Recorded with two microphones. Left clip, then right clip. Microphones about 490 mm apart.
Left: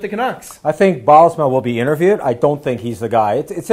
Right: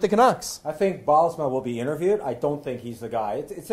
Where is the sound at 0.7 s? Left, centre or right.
Left.